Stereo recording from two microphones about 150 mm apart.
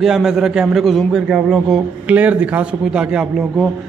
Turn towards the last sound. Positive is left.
turn(degrees=-5)  # may be behind; listen again after turning